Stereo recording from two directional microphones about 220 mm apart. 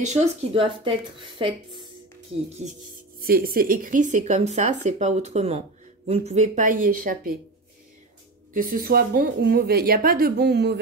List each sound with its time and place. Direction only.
0.0 s a woman's voice: 30° right (ahead or behind)
3.2 s a woman's voice: 45° right (ahead or behind)
8.5 s a woman's voice: 40° right (ahead or behind)